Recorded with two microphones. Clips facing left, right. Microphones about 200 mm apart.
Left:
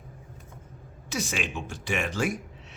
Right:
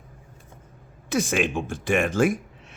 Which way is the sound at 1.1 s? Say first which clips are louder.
Right 8 dB; 50° right (ahead or behind).